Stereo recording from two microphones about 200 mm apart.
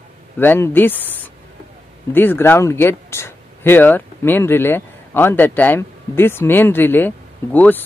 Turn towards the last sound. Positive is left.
turn(degrees=10)  # may be behind; listen again after turning